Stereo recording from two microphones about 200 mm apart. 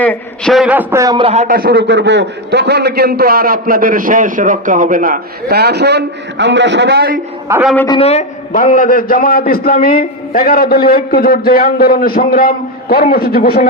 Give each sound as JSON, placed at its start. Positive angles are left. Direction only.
{"t": 0.0, "sound": "a man's voice", "side_deg": 5}
{"t": 1.5, "sound": "a man's voice", "side_deg": -50}
{"t": 7.9, "sound": "a man's voice", "side_deg": 30}